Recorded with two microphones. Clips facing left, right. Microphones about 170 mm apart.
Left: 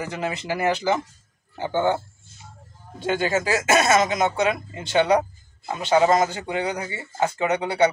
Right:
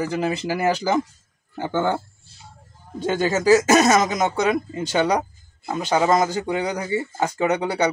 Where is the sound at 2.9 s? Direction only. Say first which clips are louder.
Right 1 dB; 40° right (ahead or behind).